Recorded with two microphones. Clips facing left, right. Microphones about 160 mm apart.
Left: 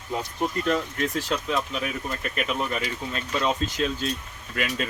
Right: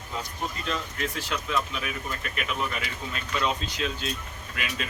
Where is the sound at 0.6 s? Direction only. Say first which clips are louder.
Left 8 dB; 50° left (ahead or behind).